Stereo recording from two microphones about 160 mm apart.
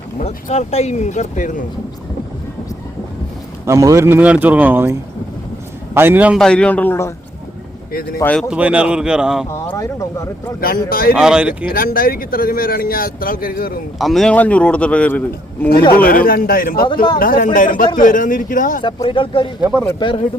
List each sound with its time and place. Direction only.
0.2 s speech: 45° left (ahead or behind)
3.7 s speech: 20° right (ahead or behind)
6.4 s a man's voice: 5° left (ahead or behind)
8.2 s a man's voice: 5° left (ahead or behind)
8.4 s speech: 10° right (ahead or behind)
9.5 s speech: 20° left (ahead or behind)
10.6 s speech: 65° left (ahead or behind)
11.1 s speech: 5° right (ahead or behind)
11.7 s speech: 65° left (ahead or behind)
14.0 s a man's voice: centre (ahead or behind)
16.0 s speech: 65° left (ahead or behind)
16.8 s speech: 30° left (ahead or behind)
17.2 s speech: 60° left (ahead or behind)
18.8 s speech: 30° left (ahead or behind)